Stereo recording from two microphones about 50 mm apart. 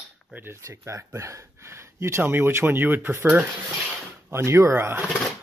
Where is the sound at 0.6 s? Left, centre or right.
Right.